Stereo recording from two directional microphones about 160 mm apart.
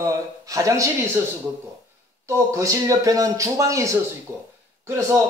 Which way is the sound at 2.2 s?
20° right (ahead or behind).